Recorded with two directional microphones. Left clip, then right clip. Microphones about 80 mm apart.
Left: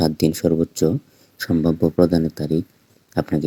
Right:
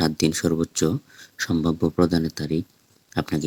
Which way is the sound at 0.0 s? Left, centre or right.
Centre.